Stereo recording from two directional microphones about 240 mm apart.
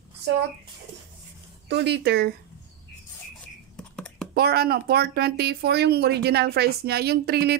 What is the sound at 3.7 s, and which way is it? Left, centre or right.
Computer keyboard, centre.